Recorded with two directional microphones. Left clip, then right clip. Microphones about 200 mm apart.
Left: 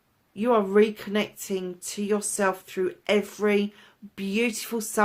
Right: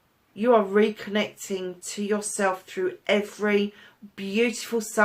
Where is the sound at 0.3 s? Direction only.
50° left (ahead or behind).